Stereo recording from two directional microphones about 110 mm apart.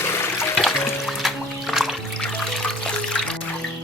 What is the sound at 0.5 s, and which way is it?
Music, centre (ahead or behind).